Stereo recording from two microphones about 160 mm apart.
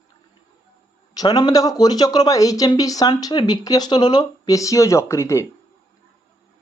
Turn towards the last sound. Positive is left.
turn(degrees=20)  # may be behind; listen again after turning